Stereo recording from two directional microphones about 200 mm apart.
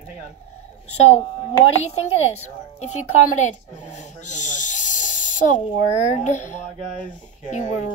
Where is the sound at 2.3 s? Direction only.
35° left (ahead or behind).